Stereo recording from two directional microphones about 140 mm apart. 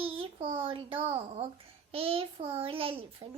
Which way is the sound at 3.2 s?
45° right (ahead or behind).